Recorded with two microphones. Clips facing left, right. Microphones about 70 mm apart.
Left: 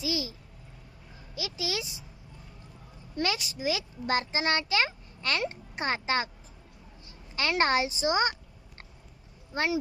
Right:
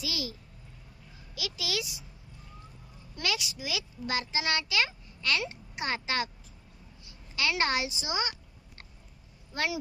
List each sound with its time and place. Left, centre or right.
0.0 s speech: left
1.4 s speech: left
3.2 s a child's voice: left
7.3 s a child's voice: left
9.5 s speech: left